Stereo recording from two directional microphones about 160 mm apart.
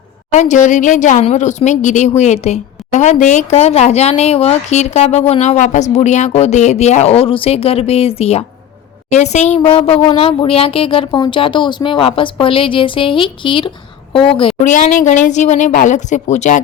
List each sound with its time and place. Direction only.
0.3 s speech: 50° left (ahead or behind)
14.6 s speech: 50° left (ahead or behind)